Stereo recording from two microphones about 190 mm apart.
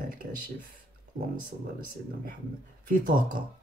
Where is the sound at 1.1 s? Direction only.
50° right (ahead or behind).